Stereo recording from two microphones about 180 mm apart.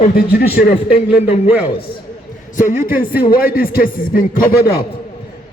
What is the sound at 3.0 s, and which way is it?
Speech, 55° left (ahead or behind).